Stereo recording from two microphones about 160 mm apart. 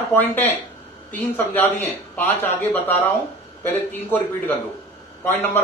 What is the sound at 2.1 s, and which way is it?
A man's voice, 10° left (ahead or behind).